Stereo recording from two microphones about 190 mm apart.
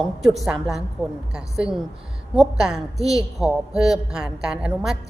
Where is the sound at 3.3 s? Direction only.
Centre (ahead or behind).